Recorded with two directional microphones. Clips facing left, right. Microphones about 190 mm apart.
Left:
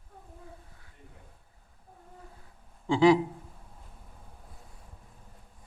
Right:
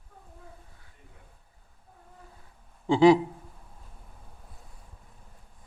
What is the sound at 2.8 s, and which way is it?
Speech, 25° right (ahead or behind).